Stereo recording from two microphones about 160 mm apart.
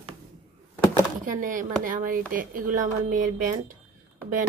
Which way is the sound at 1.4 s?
55° right (ahead or behind).